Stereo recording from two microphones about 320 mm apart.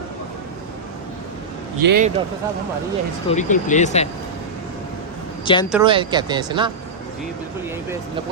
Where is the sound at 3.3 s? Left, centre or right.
Left.